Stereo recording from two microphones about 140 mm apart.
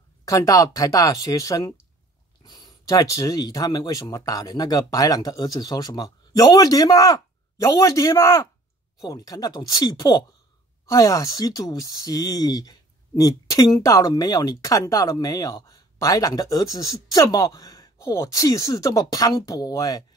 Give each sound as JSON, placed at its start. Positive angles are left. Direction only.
{"t": 0.2, "sound": "speech", "side_deg": 25}